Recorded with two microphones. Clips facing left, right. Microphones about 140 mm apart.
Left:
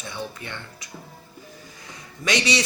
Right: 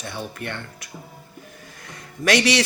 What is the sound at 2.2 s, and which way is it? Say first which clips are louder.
Speech: right 5 dB; 60° right (ahead or behind).